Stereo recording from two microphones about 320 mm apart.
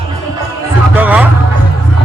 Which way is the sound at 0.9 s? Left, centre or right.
Centre.